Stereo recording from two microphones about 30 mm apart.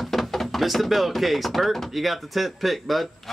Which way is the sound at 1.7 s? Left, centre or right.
Centre.